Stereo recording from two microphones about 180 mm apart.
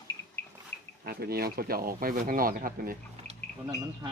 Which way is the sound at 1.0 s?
60° right (ahead or behind).